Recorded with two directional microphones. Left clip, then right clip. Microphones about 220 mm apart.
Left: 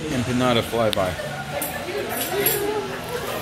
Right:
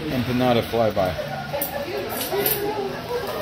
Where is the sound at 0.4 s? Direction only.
10° right (ahead or behind).